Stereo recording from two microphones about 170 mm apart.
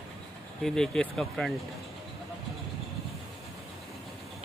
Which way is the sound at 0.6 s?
5° left (ahead or behind).